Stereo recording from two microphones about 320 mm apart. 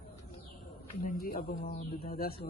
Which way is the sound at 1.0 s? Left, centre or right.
Left.